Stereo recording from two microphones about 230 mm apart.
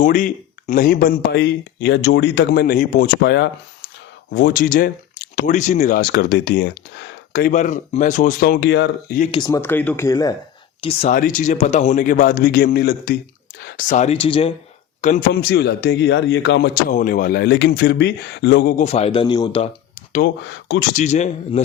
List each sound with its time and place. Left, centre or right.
0.0 s a man's voice: left
3.3 s speech: left
7.5 s a man's voice: left
9.1 s a man's voice: left
9.4 s speech: centre
11.1 s a man's voice: left
15.4 s speech: left
16.9 s speech: left
18.8 s speech: left
20.2 s speech: left
20.9 s speech: left